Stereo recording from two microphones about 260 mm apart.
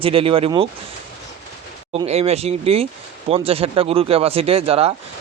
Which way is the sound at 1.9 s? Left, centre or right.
Right.